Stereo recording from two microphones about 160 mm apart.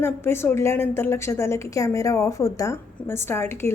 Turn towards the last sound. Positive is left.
turn(degrees=15)  # may be behind; listen again after turning